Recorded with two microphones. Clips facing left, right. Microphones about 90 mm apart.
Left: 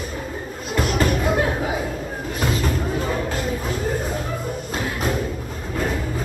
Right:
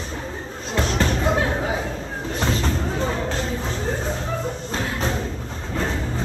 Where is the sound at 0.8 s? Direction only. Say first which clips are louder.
Left 2 dB; 30° right (ahead or behind).